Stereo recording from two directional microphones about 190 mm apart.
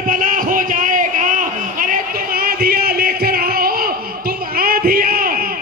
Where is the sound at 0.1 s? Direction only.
45° right (ahead or behind).